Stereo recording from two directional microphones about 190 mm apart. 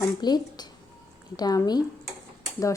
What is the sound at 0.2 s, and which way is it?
A woman's voice, 20° left (ahead or behind).